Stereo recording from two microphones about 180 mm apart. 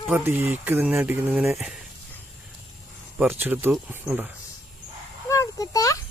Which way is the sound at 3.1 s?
10° right (ahead or behind).